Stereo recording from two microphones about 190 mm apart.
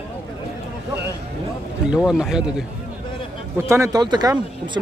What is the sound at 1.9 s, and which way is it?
Speech, 5° right (ahead or behind).